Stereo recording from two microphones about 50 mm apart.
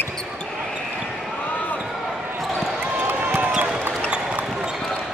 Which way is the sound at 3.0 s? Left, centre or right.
Right.